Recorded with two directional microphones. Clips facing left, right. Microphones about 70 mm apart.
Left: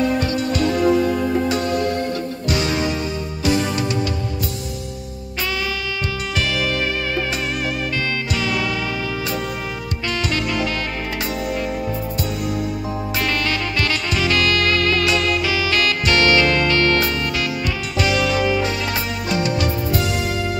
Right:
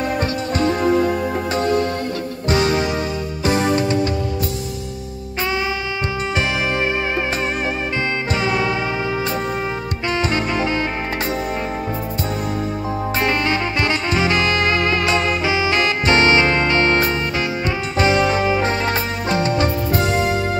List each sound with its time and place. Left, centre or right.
0.0 s music: right
3.4 s music: right
8.4 s music: right
10.0 s music: right
13.2 s music: right